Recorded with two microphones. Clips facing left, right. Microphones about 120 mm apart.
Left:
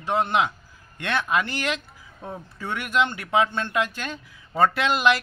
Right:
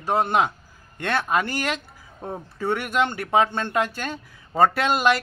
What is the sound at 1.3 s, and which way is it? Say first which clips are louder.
Speech: right 1 dB; 45° right (ahead or behind).